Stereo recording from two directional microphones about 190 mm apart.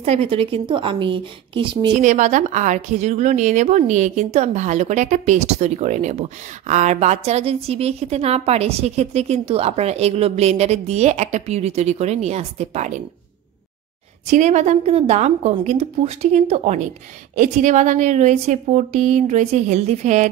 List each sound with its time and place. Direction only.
0.0 s a woman's voice: 35° right (ahead or behind)
2.0 s a woman's voice: 40° right (ahead or behind)
14.2 s a woman's voice: 40° right (ahead or behind)